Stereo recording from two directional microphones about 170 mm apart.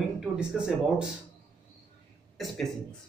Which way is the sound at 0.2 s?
5° right (ahead or behind).